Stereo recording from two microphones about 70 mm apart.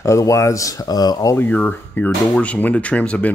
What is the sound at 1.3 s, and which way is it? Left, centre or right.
Speech, left.